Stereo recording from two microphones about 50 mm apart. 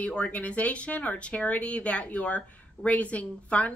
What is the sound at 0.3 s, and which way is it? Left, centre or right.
Speech, left.